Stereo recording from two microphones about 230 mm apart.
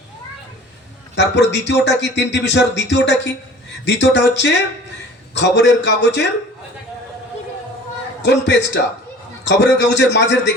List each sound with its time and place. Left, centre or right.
1.1 s speech: left
8.2 s speech: left